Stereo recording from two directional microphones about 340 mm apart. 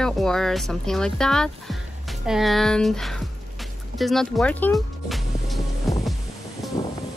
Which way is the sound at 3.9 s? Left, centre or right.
Centre.